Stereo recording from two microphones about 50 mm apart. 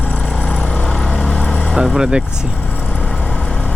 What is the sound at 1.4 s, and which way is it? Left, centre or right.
Vehicle, left.